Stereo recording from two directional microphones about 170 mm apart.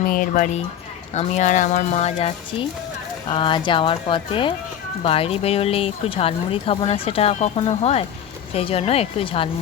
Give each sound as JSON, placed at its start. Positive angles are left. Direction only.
{"t": 0.1, "sound": "speech", "side_deg": 50}